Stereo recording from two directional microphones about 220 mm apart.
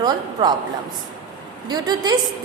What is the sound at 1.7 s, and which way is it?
Speech, 20° right (ahead or behind).